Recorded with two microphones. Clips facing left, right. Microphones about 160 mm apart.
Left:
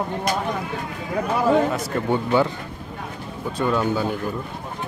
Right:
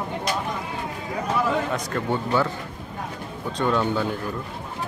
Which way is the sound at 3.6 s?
5° left (ahead or behind).